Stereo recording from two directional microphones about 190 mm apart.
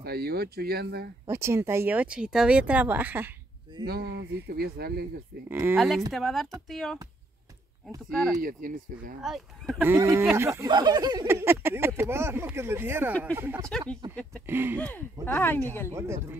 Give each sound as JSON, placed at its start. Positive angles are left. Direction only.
{"t": 0.0, "sound": "speech", "side_deg": -55}
{"t": 1.2, "sound": "speech", "side_deg": -15}
{"t": 3.8, "sound": "speech", "side_deg": -55}
{"t": 5.5, "sound": "speech", "side_deg": -10}
{"t": 5.8, "sound": "speech", "side_deg": 0}
{"t": 8.1, "sound": "speech", "side_deg": 0}
{"t": 8.4, "sound": "speech", "side_deg": -45}
{"t": 9.2, "sound": "speech", "side_deg": 0}
{"t": 13.7, "sound": "speech", "side_deg": 5}
{"t": 14.4, "sound": "speech", "side_deg": -10}
{"t": 14.8, "sound": "speech", "side_deg": 10}
{"t": 15.9, "sound": "speech", "side_deg": -15}